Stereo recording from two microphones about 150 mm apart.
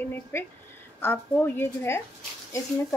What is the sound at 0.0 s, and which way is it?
A woman's voice, 15° left (ahead or behind).